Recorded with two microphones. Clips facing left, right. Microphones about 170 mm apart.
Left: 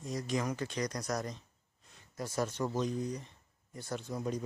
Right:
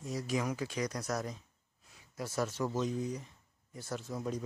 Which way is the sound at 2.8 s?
5° right (ahead or behind).